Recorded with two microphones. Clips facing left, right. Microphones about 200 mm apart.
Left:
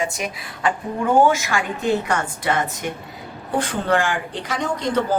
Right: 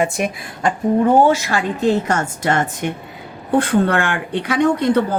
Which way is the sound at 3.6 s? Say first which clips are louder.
Right 2 dB; 60° right (ahead or behind).